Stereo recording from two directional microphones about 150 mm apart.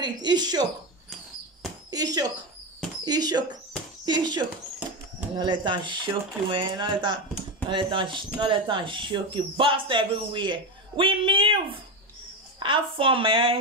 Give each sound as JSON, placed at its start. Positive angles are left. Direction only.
{"t": 0.0, "sound": "speech", "side_deg": -30}
{"t": 1.9, "sound": "a sound", "side_deg": -25}
{"t": 3.1, "sound": "speech", "side_deg": -25}